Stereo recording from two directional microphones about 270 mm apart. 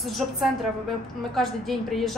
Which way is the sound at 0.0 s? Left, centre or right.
Centre.